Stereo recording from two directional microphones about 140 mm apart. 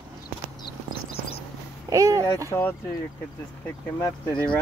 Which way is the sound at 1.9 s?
25° right (ahead or behind).